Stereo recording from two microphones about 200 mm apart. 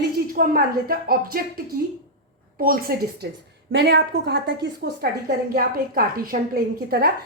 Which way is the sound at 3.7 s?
60° right (ahead or behind).